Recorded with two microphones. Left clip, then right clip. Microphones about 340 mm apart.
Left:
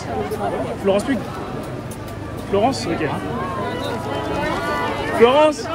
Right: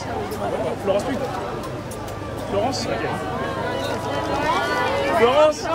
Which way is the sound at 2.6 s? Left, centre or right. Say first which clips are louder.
Left 5 dB; left.